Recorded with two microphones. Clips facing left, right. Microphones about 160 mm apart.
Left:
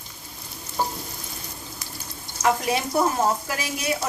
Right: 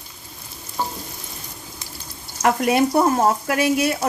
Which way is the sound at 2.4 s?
60° right (ahead or behind).